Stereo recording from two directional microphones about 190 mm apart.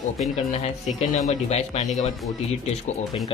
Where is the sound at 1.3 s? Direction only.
35° left (ahead or behind).